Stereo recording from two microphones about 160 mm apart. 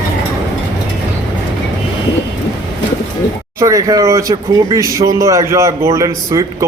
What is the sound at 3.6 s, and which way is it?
A man's voice, 20° right (ahead or behind).